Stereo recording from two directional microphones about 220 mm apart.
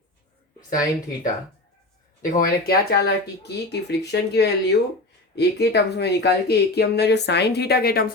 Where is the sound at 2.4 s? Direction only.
45° left (ahead or behind).